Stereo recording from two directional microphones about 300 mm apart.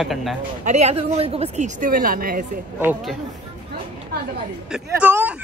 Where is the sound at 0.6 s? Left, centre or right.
Right.